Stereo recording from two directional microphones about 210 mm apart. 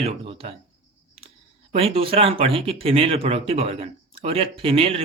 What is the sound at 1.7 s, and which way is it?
Speech, 25° right (ahead or behind).